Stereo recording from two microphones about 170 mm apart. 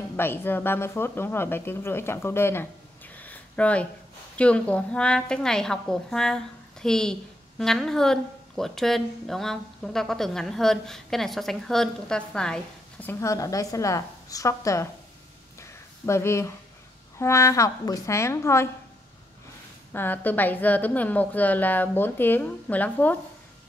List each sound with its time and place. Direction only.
0.1 s a woman's voice: 15° left (ahead or behind)
3.2 s a sound: 10° left (ahead or behind)
4.4 s a woman's voice: 5° left (ahead or behind)
15.6 s a sound: 15° left (ahead or behind)
17.2 s a woman's voice: 15° left (ahead or behind)
19.9 s a woman's voice: 10° left (ahead or behind)